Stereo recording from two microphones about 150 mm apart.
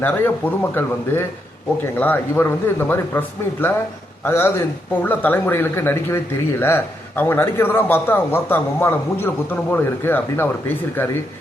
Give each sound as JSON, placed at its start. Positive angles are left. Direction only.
{"t": 0.0, "sound": "a man's voice", "side_deg": 15}